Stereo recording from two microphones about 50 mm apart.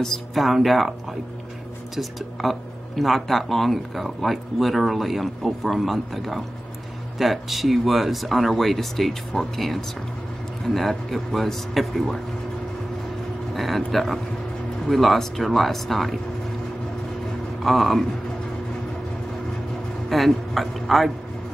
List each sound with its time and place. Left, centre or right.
0.0 s speech: centre
2.0 s speech: centre
13.6 s speech: centre
17.6 s speech: centre
20.1 s speech: centre